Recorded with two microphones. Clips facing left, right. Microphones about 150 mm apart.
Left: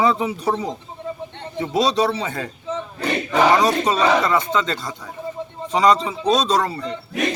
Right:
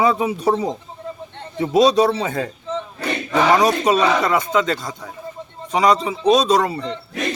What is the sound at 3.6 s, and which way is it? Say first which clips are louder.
Speech: right 2 dB; 15° right (ahead or behind).